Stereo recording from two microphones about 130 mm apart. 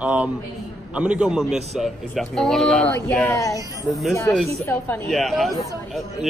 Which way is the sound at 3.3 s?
25° left (ahead or behind).